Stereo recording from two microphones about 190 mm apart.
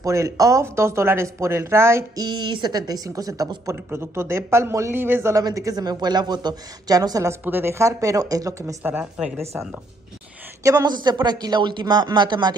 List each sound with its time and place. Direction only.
0.0 s speech: 15° right (ahead or behind)
10.6 s speech: 20° right (ahead or behind)